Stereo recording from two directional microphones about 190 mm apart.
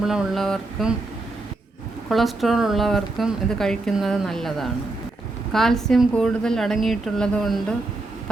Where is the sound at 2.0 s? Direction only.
Centre (ahead or behind).